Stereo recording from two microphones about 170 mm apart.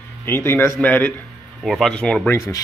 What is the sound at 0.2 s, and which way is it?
Speech, 15° left (ahead or behind).